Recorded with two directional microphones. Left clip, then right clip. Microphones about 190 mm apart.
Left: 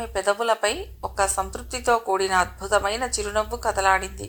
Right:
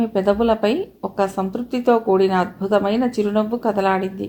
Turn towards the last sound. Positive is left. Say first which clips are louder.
# right 2 dB
turn(degrees=40)  # may be behind; listen again after turning